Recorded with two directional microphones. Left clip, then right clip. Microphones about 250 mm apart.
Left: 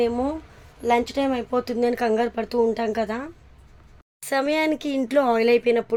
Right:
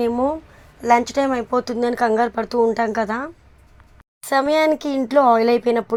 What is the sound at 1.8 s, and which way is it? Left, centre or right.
A woman's voice, centre.